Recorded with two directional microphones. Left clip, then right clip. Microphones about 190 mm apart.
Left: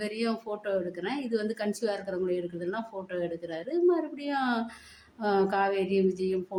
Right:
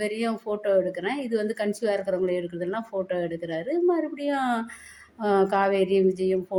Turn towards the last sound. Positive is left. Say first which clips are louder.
# right 5 dB
turn(degrees=-20)  # may be behind; listen again after turning